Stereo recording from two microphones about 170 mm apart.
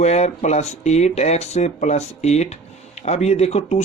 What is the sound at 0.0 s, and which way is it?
Speech, 40° left (ahead or behind).